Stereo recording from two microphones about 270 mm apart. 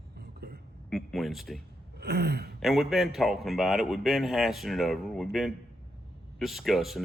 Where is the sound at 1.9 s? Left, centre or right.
Right.